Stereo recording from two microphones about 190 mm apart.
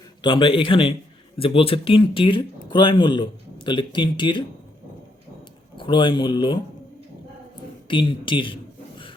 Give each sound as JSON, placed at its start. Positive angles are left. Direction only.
{"t": 0.2, "sound": "speech", "side_deg": 25}
{"t": 5.7, "sound": "speech", "side_deg": 25}
{"t": 7.9, "sound": "speech", "side_deg": 25}